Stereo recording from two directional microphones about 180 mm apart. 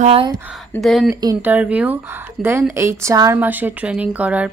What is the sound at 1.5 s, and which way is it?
Speech, 5° right (ahead or behind).